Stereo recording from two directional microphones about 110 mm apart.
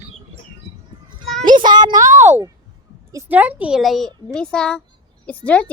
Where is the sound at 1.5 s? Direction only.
40° right (ahead or behind); by 2.5 s 25° right (ahead or behind).